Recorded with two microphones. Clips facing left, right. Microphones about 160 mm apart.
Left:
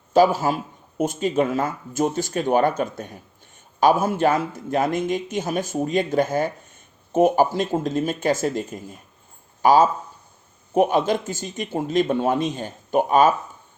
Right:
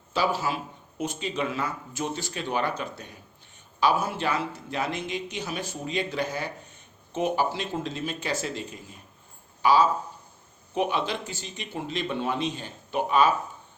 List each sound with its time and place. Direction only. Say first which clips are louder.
0.1 s speech: left 9 dB; 45° left (ahead or behind)